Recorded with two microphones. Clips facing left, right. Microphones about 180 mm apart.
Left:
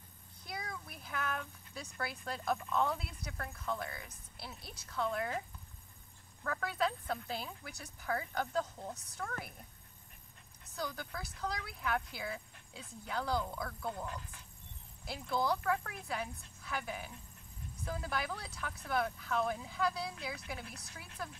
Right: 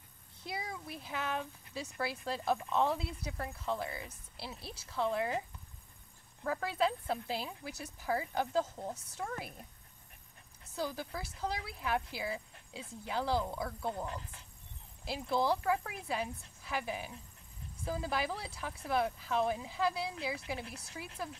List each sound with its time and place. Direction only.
0.4 s a sound: 30° right (ahead or behind)
0.8 s speech: 30° right (ahead or behind)
6.4 s speech: 25° right (ahead or behind)
10.8 s speech: 30° right (ahead or behind)